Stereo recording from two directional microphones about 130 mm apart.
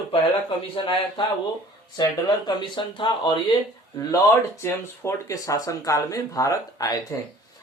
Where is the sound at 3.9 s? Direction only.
20° left (ahead or behind).